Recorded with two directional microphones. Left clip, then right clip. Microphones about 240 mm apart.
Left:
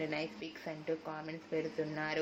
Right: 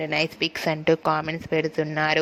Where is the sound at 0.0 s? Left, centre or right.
Right.